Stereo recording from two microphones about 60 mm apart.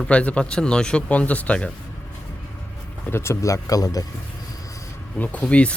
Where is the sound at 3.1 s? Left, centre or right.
Left.